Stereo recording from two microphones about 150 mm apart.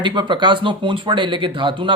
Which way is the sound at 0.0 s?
30° right (ahead or behind).